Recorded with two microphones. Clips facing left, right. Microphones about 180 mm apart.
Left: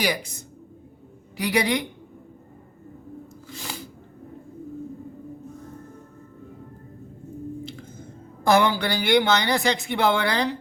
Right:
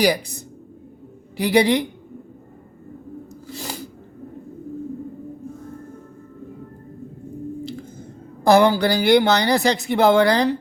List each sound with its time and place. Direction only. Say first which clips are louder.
0.0 s speech: right 7 dB; 35° right (ahead or behind)
3.4 s sneeze: right 5 dB; 40° right (ahead or behind)
7.6 s squish: right 6 dB; 35° right (ahead or behind)
8.4 s speech: right 5 dB; 35° right (ahead or behind)